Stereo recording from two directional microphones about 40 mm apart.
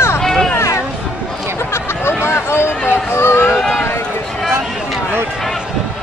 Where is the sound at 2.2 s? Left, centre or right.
Left.